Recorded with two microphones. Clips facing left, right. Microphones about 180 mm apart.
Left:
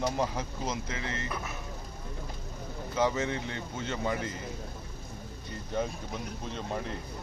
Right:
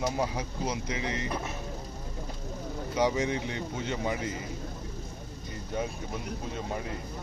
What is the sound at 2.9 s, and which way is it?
Speech, 15° right (ahead or behind).